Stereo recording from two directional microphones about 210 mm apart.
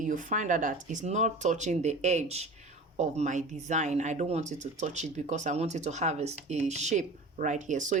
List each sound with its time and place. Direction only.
0.0 s speech: 40° right (ahead or behind)